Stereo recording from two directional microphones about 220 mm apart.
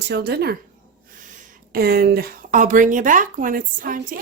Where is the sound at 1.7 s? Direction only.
45° right (ahead or behind).